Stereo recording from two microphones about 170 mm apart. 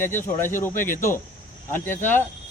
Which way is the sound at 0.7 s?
55° left (ahead or behind).